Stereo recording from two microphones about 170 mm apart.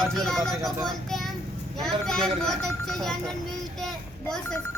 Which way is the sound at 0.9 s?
Centre (ahead or behind).